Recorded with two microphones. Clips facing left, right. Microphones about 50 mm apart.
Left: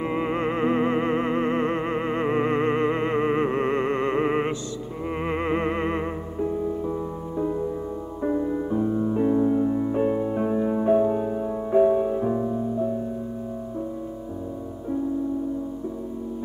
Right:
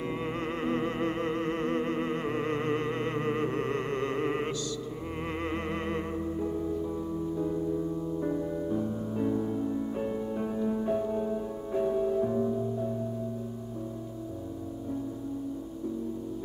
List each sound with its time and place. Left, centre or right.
0.0 s music: left